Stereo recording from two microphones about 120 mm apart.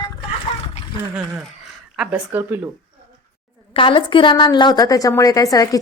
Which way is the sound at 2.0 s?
15° right (ahead or behind).